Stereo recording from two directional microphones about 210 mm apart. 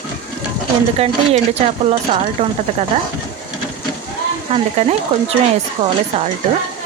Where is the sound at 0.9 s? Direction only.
30° right (ahead or behind).